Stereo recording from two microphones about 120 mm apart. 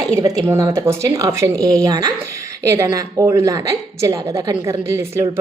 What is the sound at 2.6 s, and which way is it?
A woman's voice, 25° right (ahead or behind).